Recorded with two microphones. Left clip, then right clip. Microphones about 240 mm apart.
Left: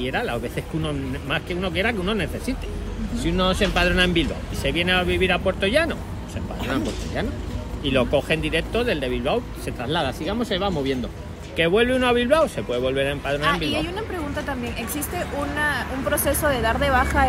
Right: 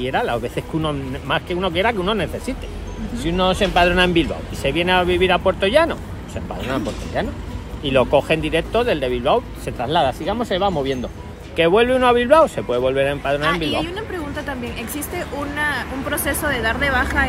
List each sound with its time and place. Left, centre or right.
0.0 s speech: right
7.2 s speech: centre
13.4 s a woman's voice: centre